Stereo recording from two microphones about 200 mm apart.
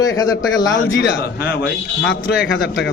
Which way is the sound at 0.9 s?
60° left (ahead or behind).